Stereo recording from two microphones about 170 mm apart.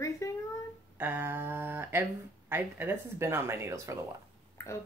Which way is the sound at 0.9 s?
10° right (ahead or behind).